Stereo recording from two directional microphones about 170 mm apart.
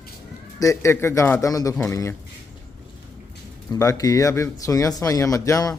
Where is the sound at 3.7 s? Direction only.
20° left (ahead or behind).